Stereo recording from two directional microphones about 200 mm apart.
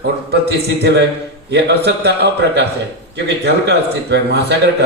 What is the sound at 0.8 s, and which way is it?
A man's voice, 60° right (ahead or behind).